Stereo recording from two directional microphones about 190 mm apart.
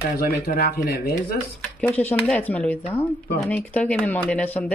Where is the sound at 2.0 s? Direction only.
10° left (ahead or behind).